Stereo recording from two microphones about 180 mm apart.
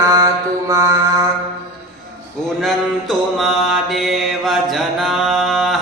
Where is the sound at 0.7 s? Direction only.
15° right (ahead or behind).